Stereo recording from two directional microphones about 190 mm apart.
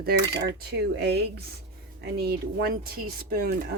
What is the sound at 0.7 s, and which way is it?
Speech, 60° right (ahead or behind).